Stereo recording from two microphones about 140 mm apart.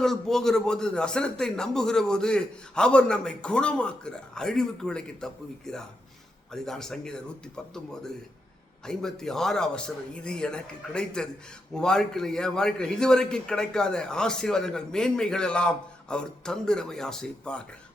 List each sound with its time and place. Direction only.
0.0 s a man's voice: 5° left (ahead or behind)